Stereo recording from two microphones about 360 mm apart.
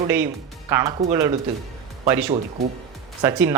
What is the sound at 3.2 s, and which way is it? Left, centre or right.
Speech, centre.